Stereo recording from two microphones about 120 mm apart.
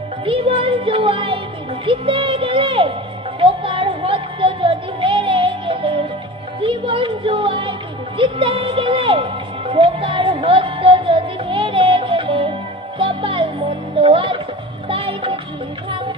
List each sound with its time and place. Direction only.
0.3 s speech: 50° right (ahead or behind)
3.4 s music: 45° right (ahead or behind)